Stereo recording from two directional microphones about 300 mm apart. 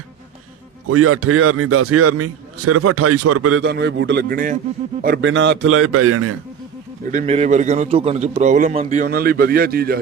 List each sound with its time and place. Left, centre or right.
0.9 s a man's voice: right
3.6 s a man's voice: right
7.1 s a man's voice: right